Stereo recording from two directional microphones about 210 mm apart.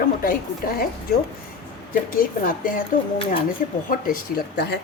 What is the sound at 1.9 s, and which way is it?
Speech, 40° left (ahead or behind).